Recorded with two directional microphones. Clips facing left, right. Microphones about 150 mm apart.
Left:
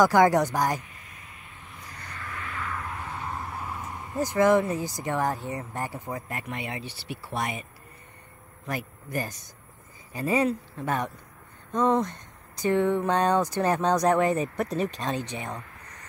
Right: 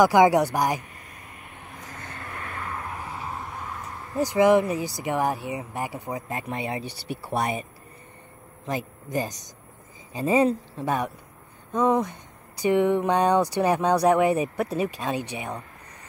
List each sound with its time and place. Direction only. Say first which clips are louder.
0.0 s speech: right 2 dB; 15° right (ahead or behind)
1.8 s vehicle: right 2 dB; 45° right (ahead or behind)
3.0 s vehicle: even; 10° right (ahead or behind)
3.5 s a sound: even; 10° left (ahead or behind)
4.2 s speech: right 2 dB; 15° right (ahead or behind); by 7.6 s 35° right (ahead or behind)
8.6 s speech: right 3 dB; 20° right (ahead or behind)
11.7 s speech: right 1 dB; 10° right (ahead or behind)